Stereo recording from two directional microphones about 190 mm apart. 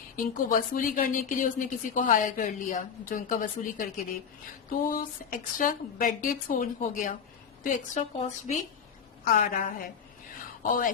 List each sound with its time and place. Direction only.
0.3 s a woman's voice: 45° left (ahead or behind)